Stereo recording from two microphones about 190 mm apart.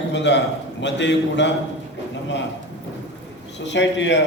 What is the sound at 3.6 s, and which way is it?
Speech, 70° left (ahead or behind).